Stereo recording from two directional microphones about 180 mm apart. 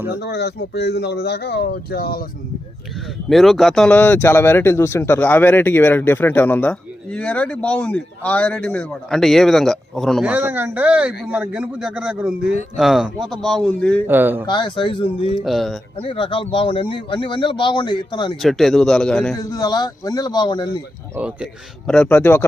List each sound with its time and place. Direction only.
0.2 s speech: 65° left (ahead or behind)
3.2 s a man's voice: centre (ahead or behind)
14.1 s speech: 10° right (ahead or behind)
14.4 s a man's voice: 25° left (ahead or behind)
15.4 s a man's voice: centre (ahead or behind)
16.0 s a man's voice: 30° left (ahead or behind)
18.4 s a man's voice: centre (ahead or behind)
19.5 s a man's voice: 20° left (ahead or behind)
21.2 s speech: 5° right (ahead or behind)
21.8 s speech: 5° left (ahead or behind)